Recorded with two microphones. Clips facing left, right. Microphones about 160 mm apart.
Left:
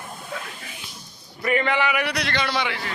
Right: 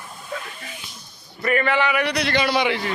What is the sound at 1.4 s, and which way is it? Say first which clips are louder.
Speech: right 2 dB; 15° left (ahead or behind).